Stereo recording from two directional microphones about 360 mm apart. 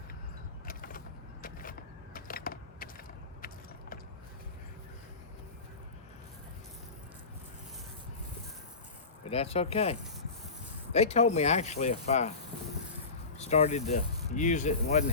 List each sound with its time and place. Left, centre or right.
0.6 s vehicle: left
2.1 s a sound: left
9.2 s speech: centre
13.4 s speech: centre